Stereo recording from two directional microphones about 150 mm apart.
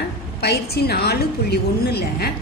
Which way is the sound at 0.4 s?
90° left.